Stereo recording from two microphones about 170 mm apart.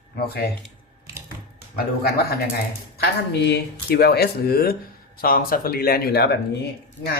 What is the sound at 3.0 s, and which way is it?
Speech, 70° left (ahead or behind).